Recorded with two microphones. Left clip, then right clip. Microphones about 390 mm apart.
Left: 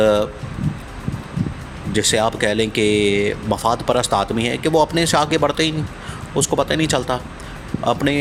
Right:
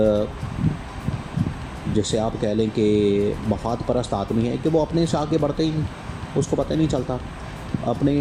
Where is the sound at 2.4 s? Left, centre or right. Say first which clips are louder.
Left 4 dB; left.